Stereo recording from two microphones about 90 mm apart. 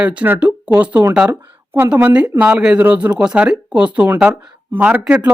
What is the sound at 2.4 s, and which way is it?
Speech, 10° right (ahead or behind).